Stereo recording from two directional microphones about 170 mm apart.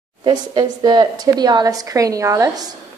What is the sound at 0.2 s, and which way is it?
A woman's voice, 25° right (ahead or behind).